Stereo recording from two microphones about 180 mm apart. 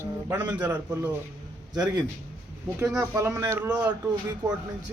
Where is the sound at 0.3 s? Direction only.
10° right (ahead or behind).